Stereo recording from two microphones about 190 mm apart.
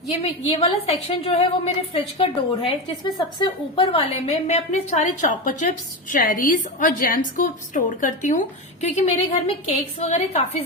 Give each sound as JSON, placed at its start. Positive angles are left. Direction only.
{"t": 0.2, "sound": "a woman's voice", "side_deg": 30}